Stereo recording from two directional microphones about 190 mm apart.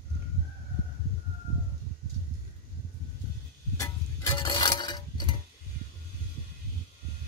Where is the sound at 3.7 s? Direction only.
20° left (ahead or behind).